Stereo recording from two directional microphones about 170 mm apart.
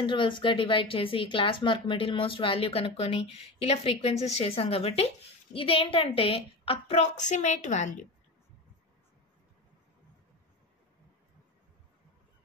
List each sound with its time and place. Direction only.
0.0 s a woman's voice: 30° left (ahead or behind); by 8.1 s 45° left (ahead or behind)